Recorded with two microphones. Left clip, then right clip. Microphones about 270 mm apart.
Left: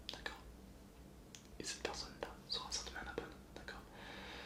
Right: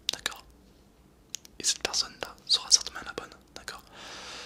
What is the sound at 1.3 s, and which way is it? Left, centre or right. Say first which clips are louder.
Whispering: right 17 dB; right.